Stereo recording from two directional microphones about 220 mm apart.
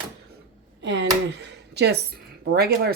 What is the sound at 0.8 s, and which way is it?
Speech, 55° right (ahead or behind).